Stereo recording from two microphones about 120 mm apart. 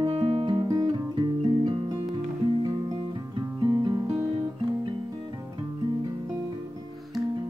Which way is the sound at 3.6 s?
40° right (ahead or behind).